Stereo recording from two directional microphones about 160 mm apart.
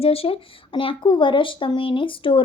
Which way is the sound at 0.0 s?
35° left (ahead or behind).